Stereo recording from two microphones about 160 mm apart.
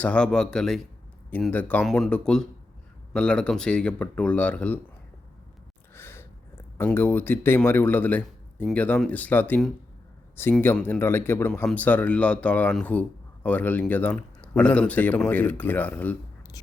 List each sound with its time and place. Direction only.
0.0 s speech: 5° left (ahead or behind)
5.9 s a sound: 15° left (ahead or behind)
8.7 s speech: 10° left (ahead or behind)